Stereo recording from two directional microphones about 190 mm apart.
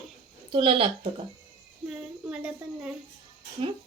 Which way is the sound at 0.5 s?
30° right (ahead or behind).